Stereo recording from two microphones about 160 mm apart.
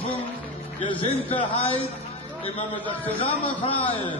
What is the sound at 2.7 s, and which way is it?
Speech, 10° left (ahead or behind).